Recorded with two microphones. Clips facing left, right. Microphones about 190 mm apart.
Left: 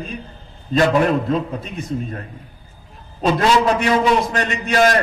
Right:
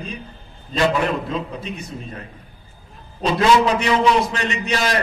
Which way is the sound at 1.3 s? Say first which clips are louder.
Left 5 dB; 50° left (ahead or behind).